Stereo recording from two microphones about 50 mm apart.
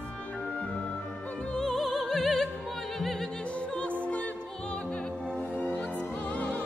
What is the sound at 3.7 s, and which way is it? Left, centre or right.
Music, left.